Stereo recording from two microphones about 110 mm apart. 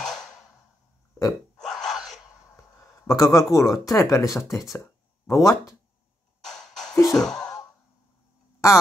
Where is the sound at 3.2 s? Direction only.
30° left (ahead or behind).